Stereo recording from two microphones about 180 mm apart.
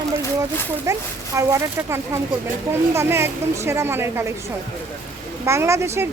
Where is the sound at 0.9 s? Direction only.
15° right (ahead or behind).